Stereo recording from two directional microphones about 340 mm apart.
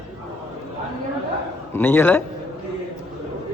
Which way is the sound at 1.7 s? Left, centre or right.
Centre.